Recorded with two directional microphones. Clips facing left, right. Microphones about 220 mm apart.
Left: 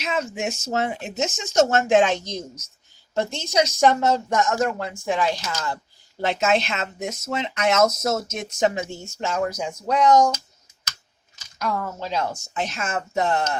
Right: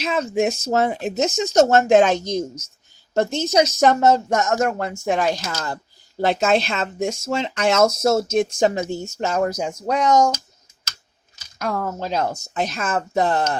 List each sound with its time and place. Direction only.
0.0 s a woman's voice: 35° right (ahead or behind)
11.6 s a woman's voice: 45° right (ahead or behind)